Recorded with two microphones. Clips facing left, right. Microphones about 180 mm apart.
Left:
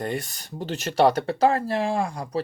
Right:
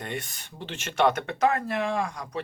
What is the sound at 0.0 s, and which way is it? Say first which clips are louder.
Speech: left 6 dB; 35° left (ahead or behind).